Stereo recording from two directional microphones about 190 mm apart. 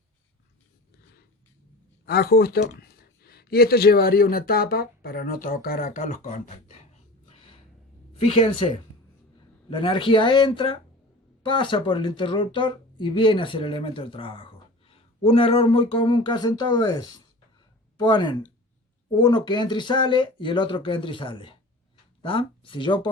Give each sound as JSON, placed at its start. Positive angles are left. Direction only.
{"t": 2.0, "sound": "speech", "side_deg": 55}